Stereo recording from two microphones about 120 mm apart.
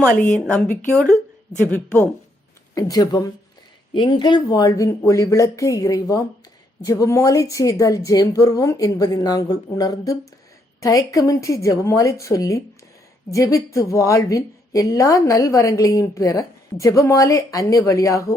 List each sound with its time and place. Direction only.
0.1 s speech: 10° left (ahead or behind)
2.7 s a woman's voice: 30° left (ahead or behind)
3.9 s a woman's voice: 45° left (ahead or behind); by 18.3 s 25° left (ahead or behind)